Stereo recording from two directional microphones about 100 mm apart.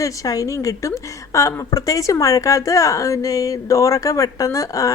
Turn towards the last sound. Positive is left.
turn(degrees=35)  # may be behind; listen again after turning